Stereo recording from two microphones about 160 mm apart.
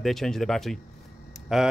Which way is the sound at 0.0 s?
Centre (ahead or behind).